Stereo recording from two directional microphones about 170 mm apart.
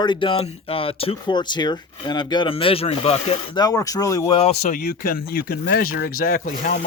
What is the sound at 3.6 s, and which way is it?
Speech, 20° left (ahead or behind).